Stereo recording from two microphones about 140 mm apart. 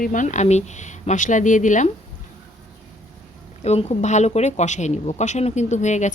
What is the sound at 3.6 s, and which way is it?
Speech, 50° left (ahead or behind).